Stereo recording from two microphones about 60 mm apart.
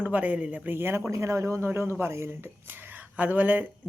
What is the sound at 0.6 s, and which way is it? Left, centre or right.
Speech, right.